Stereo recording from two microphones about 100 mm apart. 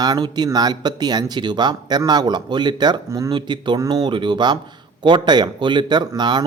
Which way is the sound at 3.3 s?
50° right (ahead or behind).